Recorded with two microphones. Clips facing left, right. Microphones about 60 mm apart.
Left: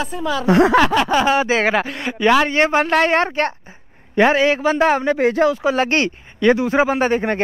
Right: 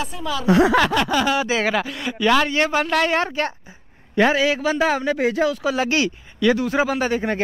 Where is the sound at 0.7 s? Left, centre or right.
Centre.